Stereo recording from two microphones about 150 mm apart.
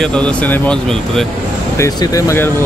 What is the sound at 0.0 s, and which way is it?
Speech, 5° left (ahead or behind).